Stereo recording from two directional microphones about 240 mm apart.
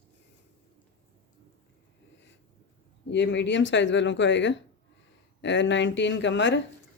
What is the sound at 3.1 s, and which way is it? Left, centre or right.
Speech, left.